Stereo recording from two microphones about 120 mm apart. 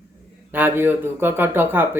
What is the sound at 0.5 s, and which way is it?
Speech, 15° right (ahead or behind).